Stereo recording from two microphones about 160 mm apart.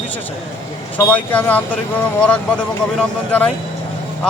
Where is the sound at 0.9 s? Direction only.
10° left (ahead or behind).